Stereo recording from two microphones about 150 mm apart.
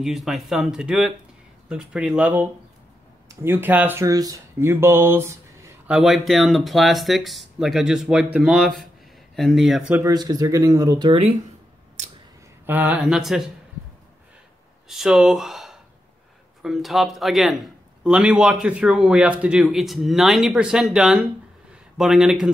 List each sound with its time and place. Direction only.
0.0 s a man's voice: centre (ahead or behind)
5.9 s a man's voice: 5° right (ahead or behind)
9.8 s speech: 10° right (ahead or behind)
10.1 s speech: 25° right (ahead or behind)
12.6 s speech: 15° right (ahead or behind)
14.9 s a man's voice: 5° right (ahead or behind)